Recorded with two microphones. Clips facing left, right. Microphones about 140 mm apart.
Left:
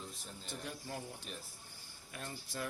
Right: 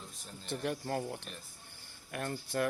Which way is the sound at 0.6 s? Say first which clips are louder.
Right 10 dB; 65° right (ahead or behind).